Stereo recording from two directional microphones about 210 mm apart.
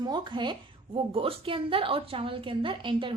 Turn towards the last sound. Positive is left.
turn(degrees=-25)  # may be behind; listen again after turning